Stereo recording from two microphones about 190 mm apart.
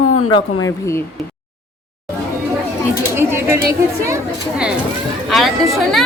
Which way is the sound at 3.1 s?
15° right (ahead or behind).